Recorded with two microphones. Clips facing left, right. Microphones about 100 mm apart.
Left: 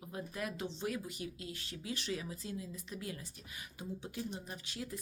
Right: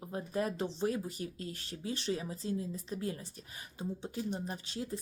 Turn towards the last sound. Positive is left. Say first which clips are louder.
# right 5 dB
turn(degrees=-30)  # may be behind; listen again after turning